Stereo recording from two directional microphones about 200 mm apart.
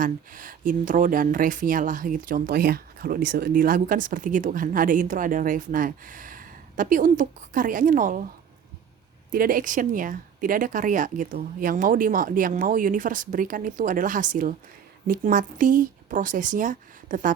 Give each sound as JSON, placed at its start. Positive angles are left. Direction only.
{"t": 0.0, "sound": "speech", "side_deg": -40}
{"t": 9.3, "sound": "speech", "side_deg": -45}